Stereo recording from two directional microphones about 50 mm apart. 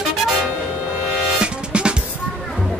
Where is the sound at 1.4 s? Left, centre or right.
Centre.